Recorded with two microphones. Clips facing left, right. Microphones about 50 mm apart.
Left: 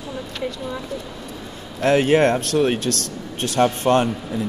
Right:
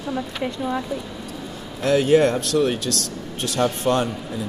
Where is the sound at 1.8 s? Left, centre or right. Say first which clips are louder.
Left 1 dB; left.